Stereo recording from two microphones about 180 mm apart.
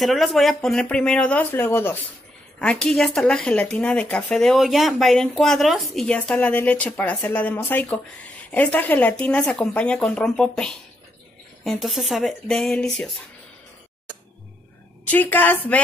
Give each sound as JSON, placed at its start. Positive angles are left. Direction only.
{"t": 0.0, "sound": "speech", "side_deg": 0}
{"t": 15.0, "sound": "a woman's voice", "side_deg": 10}